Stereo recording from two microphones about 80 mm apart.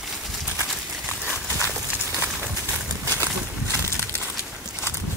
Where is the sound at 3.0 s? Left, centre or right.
Right.